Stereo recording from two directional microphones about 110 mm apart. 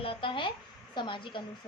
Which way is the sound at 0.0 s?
55° left (ahead or behind).